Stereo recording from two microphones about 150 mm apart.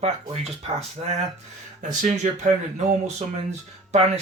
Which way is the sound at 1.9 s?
55° right (ahead or behind).